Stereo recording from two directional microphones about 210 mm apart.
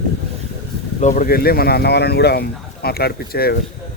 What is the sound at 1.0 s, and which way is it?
Speech, 40° left (ahead or behind).